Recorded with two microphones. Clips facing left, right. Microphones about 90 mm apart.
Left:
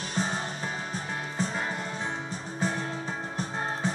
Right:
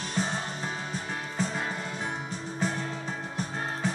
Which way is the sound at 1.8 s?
35° left (ahead or behind).